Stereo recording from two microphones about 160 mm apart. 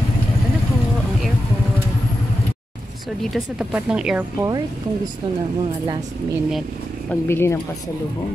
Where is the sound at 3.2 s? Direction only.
5° right (ahead or behind).